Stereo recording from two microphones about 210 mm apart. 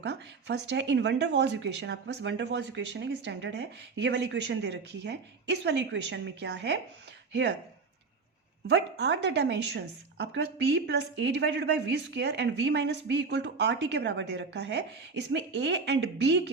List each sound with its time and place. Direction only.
0.0 s a woman's voice: 55° right (ahead or behind)
8.7 s a woman's voice: 55° right (ahead or behind)